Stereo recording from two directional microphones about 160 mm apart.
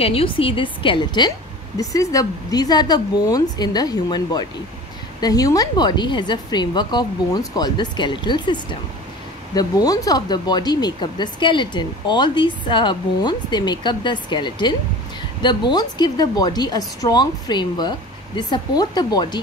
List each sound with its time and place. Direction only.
0.0 s a woman's voice: 35° left (ahead or behind)